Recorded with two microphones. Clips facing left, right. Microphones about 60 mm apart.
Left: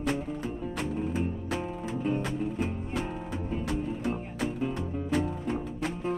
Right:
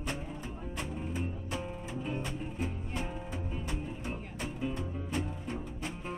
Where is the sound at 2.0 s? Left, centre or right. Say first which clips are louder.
Left 8 dB; left.